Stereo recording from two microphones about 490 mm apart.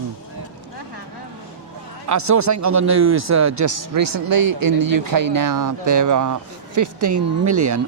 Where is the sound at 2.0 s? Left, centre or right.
Right.